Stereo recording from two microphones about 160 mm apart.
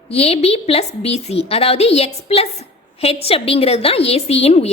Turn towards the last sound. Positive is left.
turn(degrees=40)  # may be behind; listen again after turning